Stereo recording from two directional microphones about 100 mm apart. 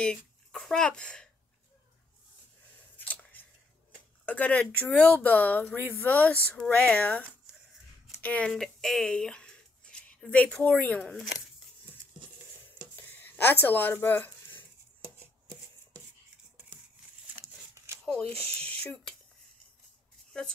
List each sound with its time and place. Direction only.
0.0 s speech: 5° left (ahead or behind)
3.0 s chewing: 15° left (ahead or behind)
4.3 s speech: 15° left (ahead or behind)
12.9 s speech: 20° left (ahead or behind)
15.0 s a sound: 25° right (ahead or behind)
18.0 s speech: 10° left (ahead or behind)
18.6 s a sound: 15° left (ahead or behind)